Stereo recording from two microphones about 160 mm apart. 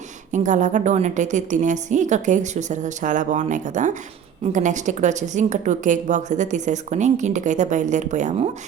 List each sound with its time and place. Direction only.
0.3 s a woman's voice: 50° right (ahead or behind)